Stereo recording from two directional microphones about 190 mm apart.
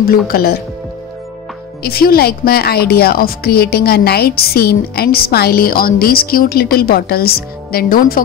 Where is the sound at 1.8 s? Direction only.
55° left (ahead or behind).